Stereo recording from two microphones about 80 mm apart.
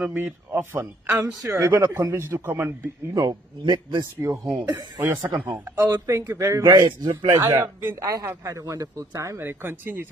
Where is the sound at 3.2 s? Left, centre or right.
Right.